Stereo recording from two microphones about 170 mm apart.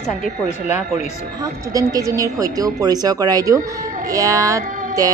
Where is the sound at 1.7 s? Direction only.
20° right (ahead or behind).